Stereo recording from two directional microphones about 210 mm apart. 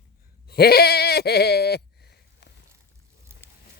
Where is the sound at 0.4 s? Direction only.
50° left (ahead or behind).